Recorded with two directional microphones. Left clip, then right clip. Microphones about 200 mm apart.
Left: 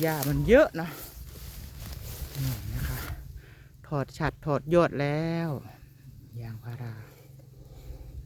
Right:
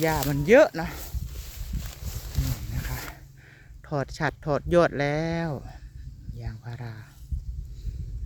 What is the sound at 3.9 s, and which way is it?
Speech, 5° right (ahead or behind).